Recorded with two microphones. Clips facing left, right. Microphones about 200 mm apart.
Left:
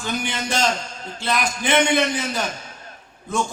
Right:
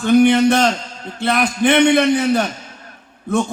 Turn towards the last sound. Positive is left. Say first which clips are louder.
# right 7 dB
turn(degrees=-60)  # may be behind; listen again after turning